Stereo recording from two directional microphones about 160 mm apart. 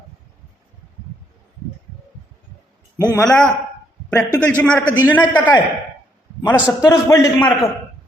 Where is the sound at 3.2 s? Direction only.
5° left (ahead or behind).